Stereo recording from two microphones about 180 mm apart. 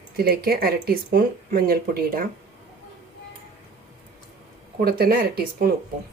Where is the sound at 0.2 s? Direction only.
60° right (ahead or behind).